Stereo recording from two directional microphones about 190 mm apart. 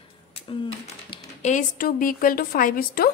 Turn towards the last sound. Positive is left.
turn(degrees=50)  # may be behind; listen again after turning